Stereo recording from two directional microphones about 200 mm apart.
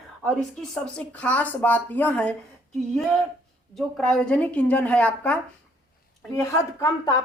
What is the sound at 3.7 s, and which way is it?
Speech, centre (ahead or behind).